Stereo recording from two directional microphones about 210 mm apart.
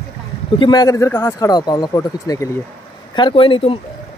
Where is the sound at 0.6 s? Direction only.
20° left (ahead or behind).